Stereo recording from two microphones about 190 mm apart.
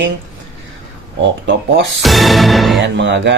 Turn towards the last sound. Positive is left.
turn(degrees=-70)  # may be behind; listen again after turning